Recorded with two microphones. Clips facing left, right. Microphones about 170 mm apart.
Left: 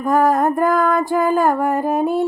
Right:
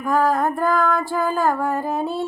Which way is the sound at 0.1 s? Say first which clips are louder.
Left 4 dB; 20° left (ahead or behind).